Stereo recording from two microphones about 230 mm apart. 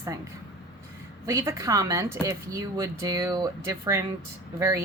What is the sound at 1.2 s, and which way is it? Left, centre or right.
Speech, centre.